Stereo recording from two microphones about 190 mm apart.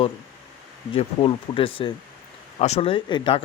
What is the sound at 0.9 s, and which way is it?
Speech, 30° left (ahead or behind).